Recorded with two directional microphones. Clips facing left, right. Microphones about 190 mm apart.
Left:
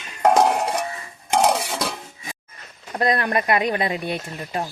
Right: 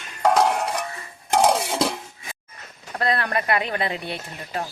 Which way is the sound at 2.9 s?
15° left (ahead or behind).